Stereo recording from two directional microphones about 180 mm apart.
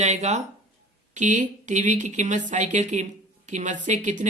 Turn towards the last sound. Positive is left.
turn(degrees=-45)  # may be behind; listen again after turning